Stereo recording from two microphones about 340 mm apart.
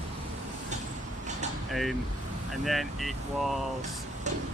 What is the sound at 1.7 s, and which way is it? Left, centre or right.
Speech, centre.